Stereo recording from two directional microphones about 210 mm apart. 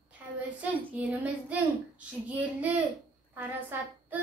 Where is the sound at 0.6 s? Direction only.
5° right (ahead or behind).